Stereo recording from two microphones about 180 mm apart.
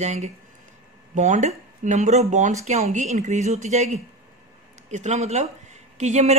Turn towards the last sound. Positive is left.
turn(degrees=-40)  # may be behind; listen again after turning